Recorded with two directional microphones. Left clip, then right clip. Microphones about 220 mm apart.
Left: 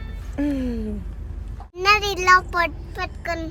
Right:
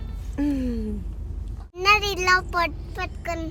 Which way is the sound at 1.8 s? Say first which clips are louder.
Left 1 dB; 55° left (ahead or behind).